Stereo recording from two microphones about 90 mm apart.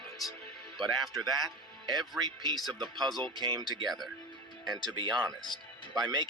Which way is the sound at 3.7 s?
55° right (ahead or behind).